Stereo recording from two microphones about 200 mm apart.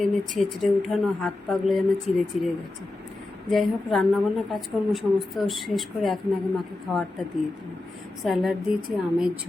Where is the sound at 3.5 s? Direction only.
Centre (ahead or behind).